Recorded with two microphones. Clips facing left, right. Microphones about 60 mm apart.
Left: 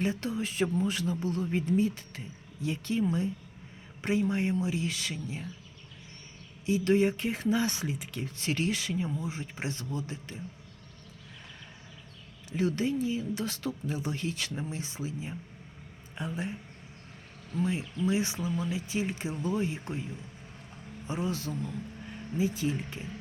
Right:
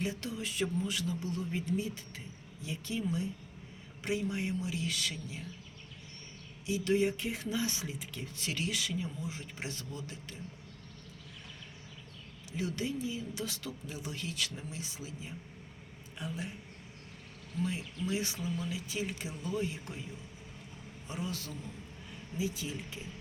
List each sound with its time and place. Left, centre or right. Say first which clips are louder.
0.0 s a man's voice: left 6 dB; left
4.0 s speech: left 6 dB; left
6.7 s a man's voice: left 5 dB; left
8.4 s speech: left 5 dB; left
12.5 s speech: left 7 dB; left
17.6 s speech: left 5 dB; left
21.1 s speech: left 7 dB; left
22.4 s a man's voice: left 7 dB; left